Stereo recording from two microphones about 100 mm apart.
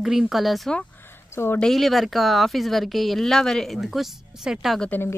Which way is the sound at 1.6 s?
Centre (ahead or behind).